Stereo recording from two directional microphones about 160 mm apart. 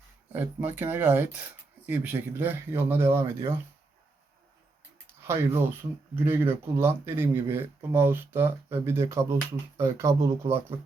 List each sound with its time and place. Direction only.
0.3 s speech: 10° right (ahead or behind)
5.2 s speech: 15° right (ahead or behind)